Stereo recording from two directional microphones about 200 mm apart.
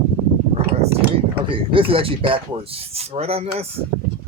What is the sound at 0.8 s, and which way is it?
Speech, 30° right (ahead or behind).